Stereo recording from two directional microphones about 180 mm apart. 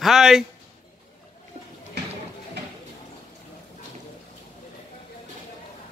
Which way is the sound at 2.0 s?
70° right (ahead or behind).